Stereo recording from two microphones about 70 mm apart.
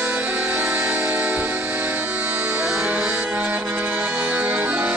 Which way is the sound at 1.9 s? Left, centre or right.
Right.